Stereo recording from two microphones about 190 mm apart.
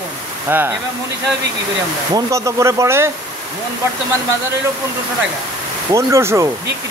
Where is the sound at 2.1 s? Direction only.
15° right (ahead or behind).